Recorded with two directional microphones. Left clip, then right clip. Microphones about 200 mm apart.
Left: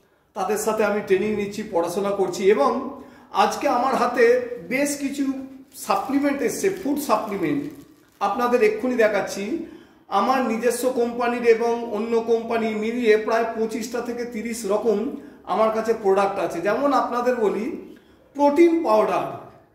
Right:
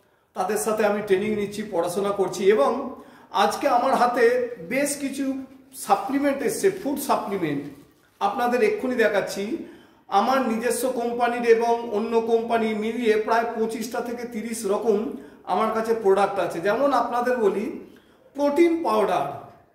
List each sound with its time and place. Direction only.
0.4 s a man's voice: 15° right (ahead or behind)